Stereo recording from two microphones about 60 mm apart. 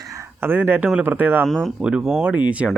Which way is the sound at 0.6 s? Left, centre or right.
Right.